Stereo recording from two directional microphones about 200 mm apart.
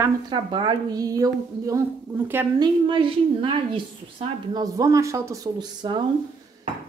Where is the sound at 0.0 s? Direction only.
25° right (ahead or behind).